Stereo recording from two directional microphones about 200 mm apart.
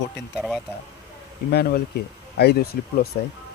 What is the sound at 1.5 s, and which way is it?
Speech, 55° left (ahead or behind).